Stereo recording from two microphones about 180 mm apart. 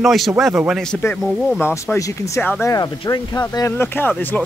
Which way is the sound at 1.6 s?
15° left (ahead or behind).